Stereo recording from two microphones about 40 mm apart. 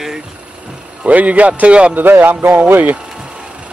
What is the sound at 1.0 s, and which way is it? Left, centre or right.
Speech, right.